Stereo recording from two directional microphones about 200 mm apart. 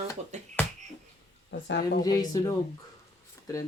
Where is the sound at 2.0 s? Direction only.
20° left (ahead or behind).